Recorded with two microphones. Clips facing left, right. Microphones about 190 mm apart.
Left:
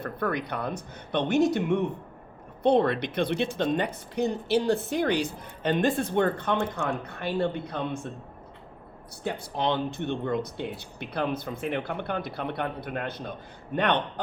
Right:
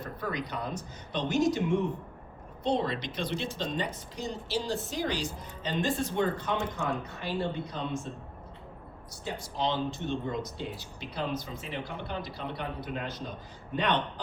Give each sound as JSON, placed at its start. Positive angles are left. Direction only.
{"t": 0.0, "sound": "speech", "side_deg": 60}
{"t": 9.2, "sound": "speech", "side_deg": 60}